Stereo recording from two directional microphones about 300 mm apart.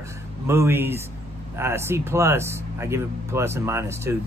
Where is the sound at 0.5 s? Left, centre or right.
Centre.